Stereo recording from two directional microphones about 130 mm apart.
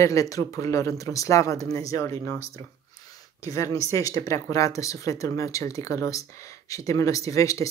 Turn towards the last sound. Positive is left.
turn(degrees=25)  # may be behind; listen again after turning